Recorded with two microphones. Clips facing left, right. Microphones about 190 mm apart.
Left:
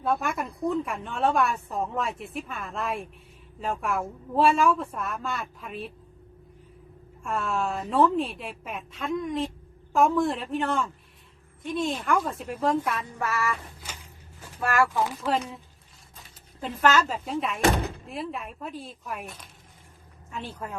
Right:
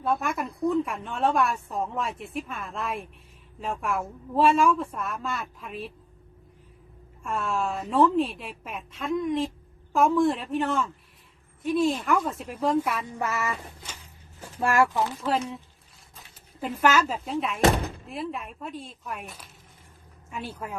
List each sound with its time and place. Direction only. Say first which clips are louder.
0.0 s a woman's voice: even; centre (ahead or behind)
7.2 s a woman's voice: even; centre (ahead or behind)
13.1 s child singing: even; 20° right (ahead or behind)
14.6 s child singing: right 2 dB; 25° right (ahead or behind)
15.0 s a woman's voice: even; 10° left (ahead or behind); by 20.7 s 10° right (ahead or behind)